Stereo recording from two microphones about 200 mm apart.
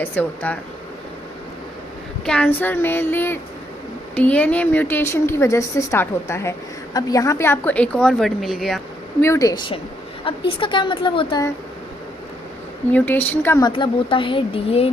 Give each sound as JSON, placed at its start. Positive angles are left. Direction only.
{"t": 0.0, "sound": "a woman's voice", "side_deg": 10}
{"t": 2.2, "sound": "a woman's voice", "side_deg": 5}
{"t": 9.2, "sound": "a woman's voice", "side_deg": 15}
{"t": 12.9, "sound": "a woman's voice", "side_deg": 10}
{"t": 13.7, "sound": "a woman's voice", "side_deg": 25}